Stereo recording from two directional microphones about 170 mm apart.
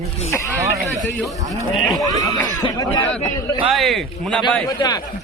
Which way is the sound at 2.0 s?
20° left (ahead or behind).